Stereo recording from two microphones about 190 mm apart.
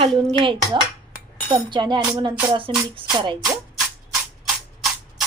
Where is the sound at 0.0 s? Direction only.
25° right (ahead or behind).